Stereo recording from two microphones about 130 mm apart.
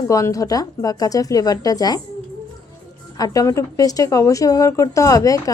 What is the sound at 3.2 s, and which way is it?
A woman's voice, 25° left (ahead or behind).